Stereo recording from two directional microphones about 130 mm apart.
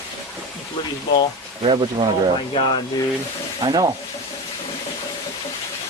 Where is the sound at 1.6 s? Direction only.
45° right (ahead or behind).